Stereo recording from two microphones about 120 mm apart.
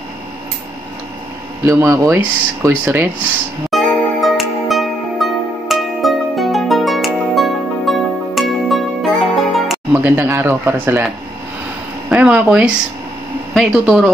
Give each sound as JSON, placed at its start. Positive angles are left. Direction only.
{"t": 1.6, "sound": "speech", "side_deg": -25}
{"t": 3.7, "sound": "music", "side_deg": 0}
{"t": 9.9, "sound": "speech", "side_deg": -20}
{"t": 12.1, "sound": "speech", "side_deg": -15}